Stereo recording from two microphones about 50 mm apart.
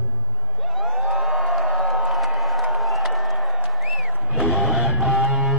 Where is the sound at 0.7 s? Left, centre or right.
Centre.